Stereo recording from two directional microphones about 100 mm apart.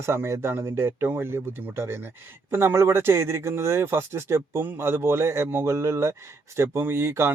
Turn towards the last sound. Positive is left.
turn(degrees=-25)  # may be behind; listen again after turning